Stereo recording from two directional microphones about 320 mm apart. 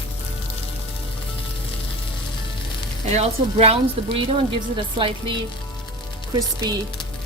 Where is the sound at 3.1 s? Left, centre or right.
Centre.